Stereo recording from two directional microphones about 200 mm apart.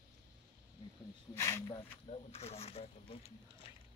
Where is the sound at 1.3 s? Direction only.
15° left (ahead or behind).